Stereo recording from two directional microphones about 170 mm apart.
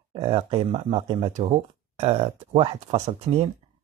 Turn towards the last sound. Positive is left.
turn(degrees=-40)  # may be behind; listen again after turning